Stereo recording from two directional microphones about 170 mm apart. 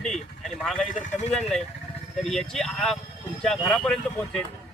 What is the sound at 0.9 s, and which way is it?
Speech, 45° left (ahead or behind).